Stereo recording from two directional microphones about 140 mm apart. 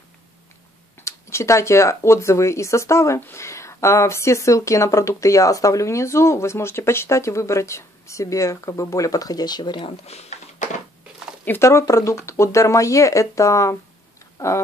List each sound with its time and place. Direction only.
1.0 s speech: 20° left (ahead or behind); by 10.8 s 55° left (ahead or behind)
11.4 s speech: 15° left (ahead or behind)